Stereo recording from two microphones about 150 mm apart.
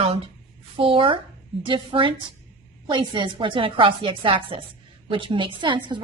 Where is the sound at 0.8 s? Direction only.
35° right (ahead or behind).